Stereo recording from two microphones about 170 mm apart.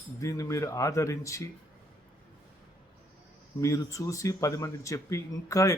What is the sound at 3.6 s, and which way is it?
Speech, 20° left (ahead or behind).